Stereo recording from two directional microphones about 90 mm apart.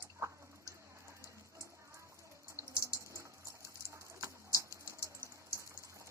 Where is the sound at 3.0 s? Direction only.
35° right (ahead or behind).